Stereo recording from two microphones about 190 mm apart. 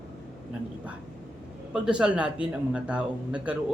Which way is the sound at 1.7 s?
5° right (ahead or behind).